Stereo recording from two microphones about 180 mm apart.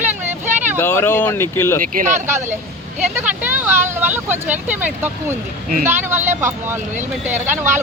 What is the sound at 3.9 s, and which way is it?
Speech, 10° right (ahead or behind).